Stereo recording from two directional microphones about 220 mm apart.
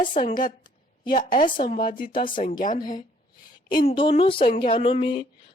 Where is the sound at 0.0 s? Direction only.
20° left (ahead or behind).